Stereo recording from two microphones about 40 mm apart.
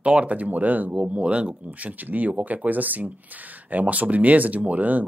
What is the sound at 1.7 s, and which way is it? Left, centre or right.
Speech, right.